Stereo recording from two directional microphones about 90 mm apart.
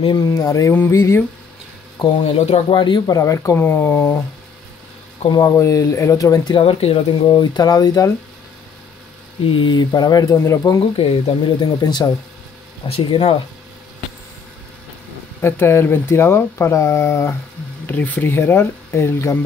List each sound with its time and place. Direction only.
0.2 s speech: 40° left (ahead or behind)
0.7 s speech: 30° left (ahead or behind)
2.2 s speech: 75° left (ahead or behind)
3.1 s speech: 35° left (ahead or behind)
5.6 s speech: 35° left (ahead or behind)
6.5 s speech: 85° left
7.5 s speech: 50° left (ahead or behind)
9.4 s speech: 70° left (ahead or behind); by 10.3 s 50° left (ahead or behind)
10.3 s speech: 35° left (ahead or behind)
10.8 s speech: 90° left
11.2 s speech: 45° left (ahead or behind)
12.8 s speech: 90° left
15.4 s speech: 25° left (ahead or behind)
17.8 s speech: 20° left (ahead or behind)